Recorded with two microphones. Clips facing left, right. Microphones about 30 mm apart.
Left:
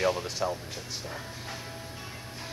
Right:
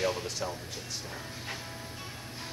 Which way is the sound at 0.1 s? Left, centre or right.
Centre.